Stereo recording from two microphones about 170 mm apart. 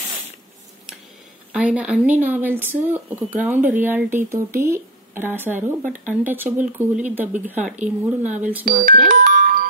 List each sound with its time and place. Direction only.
1.5 s speech: 5° right (ahead or behind)
8.6 s speech: 55° right (ahead or behind)
9.3 s music: 55° right (ahead or behind)